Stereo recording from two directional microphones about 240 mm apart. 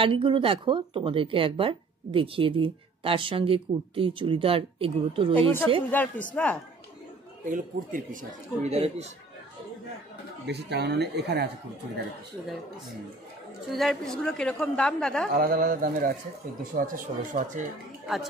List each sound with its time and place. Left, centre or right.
0.0 s speech: right
5.3 s a woman's voice: centre
7.4 s speech: right
10.4 s speech: right
12.4 s a woman's voice: centre
13.7 s a woman's voice: centre
15.3 s speech: right